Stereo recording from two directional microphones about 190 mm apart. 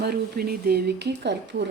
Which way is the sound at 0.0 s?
55° right (ahead or behind).